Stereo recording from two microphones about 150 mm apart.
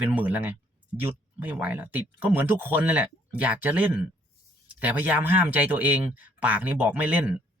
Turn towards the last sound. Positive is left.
turn(degrees=-10)  # may be behind; listen again after turning